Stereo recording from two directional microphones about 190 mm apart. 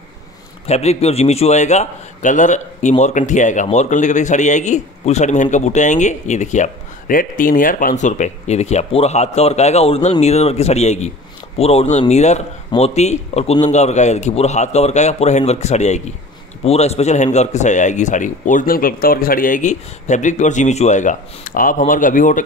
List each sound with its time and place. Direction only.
0.7 s a man's voice: 35° left (ahead or behind)